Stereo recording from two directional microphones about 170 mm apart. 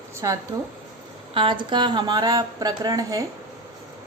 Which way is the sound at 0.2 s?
20° right (ahead or behind).